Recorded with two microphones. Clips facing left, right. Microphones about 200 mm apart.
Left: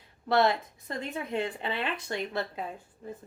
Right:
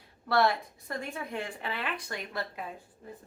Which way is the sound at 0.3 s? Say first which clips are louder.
Left 2 dB; 20° left (ahead or behind).